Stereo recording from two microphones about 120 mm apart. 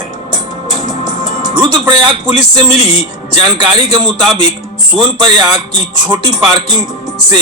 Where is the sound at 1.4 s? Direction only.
35° right (ahead or behind).